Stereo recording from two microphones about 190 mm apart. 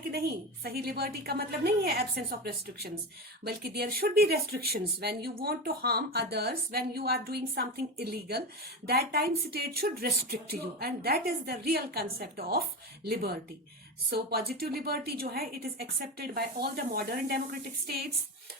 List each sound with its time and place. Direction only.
0.1 s a woman's voice: 55° right (ahead or behind)
14.1 s a woman's voice: 55° right (ahead or behind)